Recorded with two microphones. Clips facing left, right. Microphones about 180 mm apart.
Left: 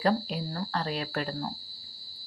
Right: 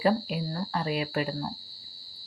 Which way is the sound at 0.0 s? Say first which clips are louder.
Right 2 dB; 10° right (ahead or behind).